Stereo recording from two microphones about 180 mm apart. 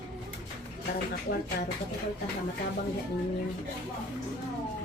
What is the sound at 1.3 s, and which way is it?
Speech, 50° left (ahead or behind).